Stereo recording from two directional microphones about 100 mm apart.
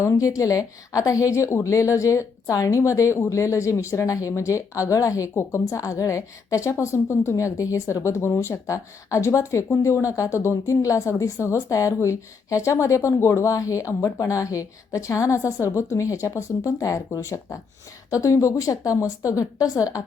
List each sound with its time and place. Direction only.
0.0 s a woman's voice: 35° left (ahead or behind)